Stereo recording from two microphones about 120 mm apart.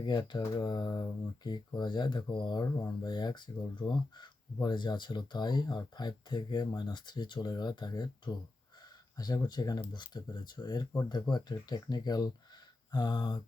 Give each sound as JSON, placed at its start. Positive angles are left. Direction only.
{"t": 0.0, "sound": "speech", "side_deg": 40}